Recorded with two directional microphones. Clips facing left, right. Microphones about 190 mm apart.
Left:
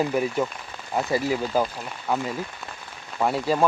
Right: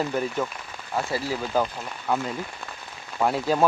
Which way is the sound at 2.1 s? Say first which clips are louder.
Even; 5° left (ahead or behind).